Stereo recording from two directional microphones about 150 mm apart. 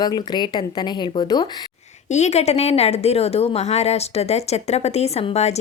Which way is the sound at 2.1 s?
50° left (ahead or behind).